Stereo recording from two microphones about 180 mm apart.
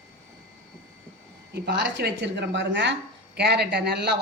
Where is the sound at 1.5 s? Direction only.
70° right (ahead or behind).